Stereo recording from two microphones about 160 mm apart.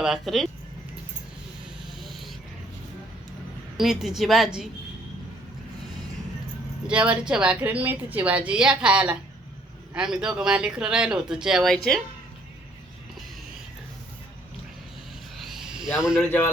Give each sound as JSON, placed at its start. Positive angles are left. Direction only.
{"t": 0.0, "sound": "speech", "side_deg": 0}
{"t": 2.0, "sound": "a sound", "side_deg": 0}
{"t": 3.8, "sound": "speech", "side_deg": 0}
{"t": 6.8, "sound": "a woman's voice", "side_deg": -10}
{"t": 15.4, "sound": "a sound", "side_deg": 0}
{"t": 16.0, "sound": "speech", "side_deg": -5}